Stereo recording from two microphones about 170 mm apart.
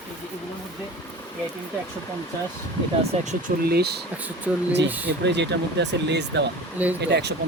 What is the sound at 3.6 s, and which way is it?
Speech, 70° right (ahead or behind).